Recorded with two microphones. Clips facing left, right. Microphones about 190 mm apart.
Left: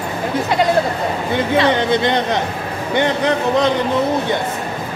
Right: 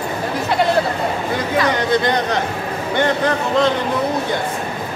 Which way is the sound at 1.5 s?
25° left (ahead or behind).